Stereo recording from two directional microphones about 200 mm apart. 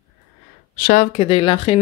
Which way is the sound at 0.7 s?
40° left (ahead or behind).